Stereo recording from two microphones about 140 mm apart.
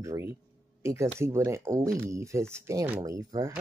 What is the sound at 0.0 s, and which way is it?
Speech, 20° right (ahead or behind).